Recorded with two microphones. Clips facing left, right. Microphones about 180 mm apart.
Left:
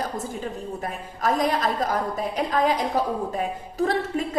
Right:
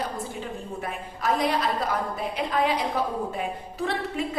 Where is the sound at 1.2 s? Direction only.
45° left (ahead or behind).